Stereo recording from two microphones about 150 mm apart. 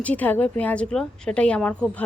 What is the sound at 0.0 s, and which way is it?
Speech, 10° left (ahead or behind).